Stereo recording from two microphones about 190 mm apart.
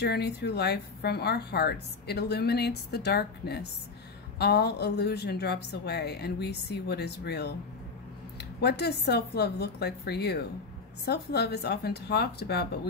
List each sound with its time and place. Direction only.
0.0 s a woman's voice: 60° left (ahead or behind)